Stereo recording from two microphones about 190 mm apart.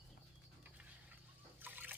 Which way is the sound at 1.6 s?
10° right (ahead or behind).